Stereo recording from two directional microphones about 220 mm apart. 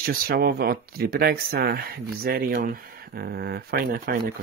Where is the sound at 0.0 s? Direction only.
45° right (ahead or behind).